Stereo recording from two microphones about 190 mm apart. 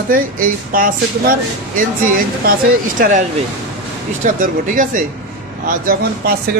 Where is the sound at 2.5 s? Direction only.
45° right (ahead or behind).